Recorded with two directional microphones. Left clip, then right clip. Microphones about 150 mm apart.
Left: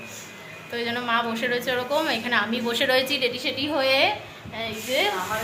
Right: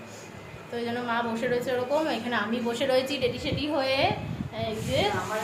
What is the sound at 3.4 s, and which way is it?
Speech, 15° left (ahead or behind).